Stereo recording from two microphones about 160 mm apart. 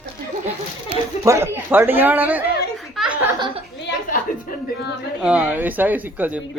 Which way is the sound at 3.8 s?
90° left.